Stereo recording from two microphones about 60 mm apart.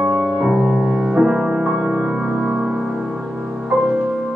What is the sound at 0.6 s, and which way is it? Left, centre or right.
Music, right.